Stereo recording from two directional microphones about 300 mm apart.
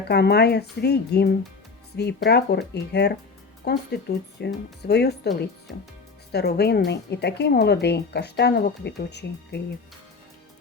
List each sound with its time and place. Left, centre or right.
0.1 s speech: left
6.3 s speech: left